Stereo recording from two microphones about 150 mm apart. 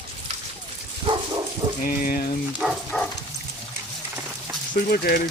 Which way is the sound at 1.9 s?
70° left (ahead or behind).